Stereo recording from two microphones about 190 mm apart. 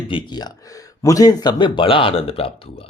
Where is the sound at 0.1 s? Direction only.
25° left (ahead or behind).